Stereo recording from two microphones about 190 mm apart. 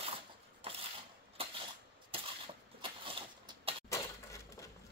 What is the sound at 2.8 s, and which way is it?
Vehicle, 25° right (ahead or behind).